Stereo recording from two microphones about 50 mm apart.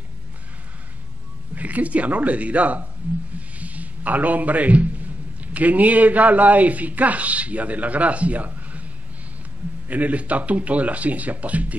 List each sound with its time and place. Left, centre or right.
1.5 s a man's voice: right
9.8 s speech: right